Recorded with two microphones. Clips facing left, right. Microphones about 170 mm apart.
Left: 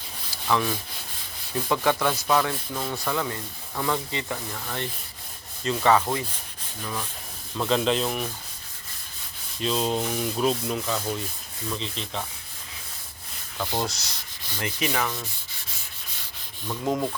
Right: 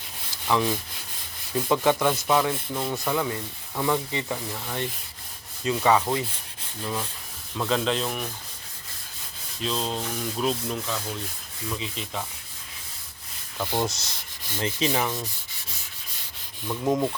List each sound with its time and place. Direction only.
0.3 s rub: 20° right (ahead or behind)
1.7 s sanding: 15° right (ahead or behind)
7.6 s sanding: centre (ahead or behind)
9.6 s sanding: centre (ahead or behind)
13.6 s sanding: 15° right (ahead or behind)
16.9 s sanding: 5° right (ahead or behind)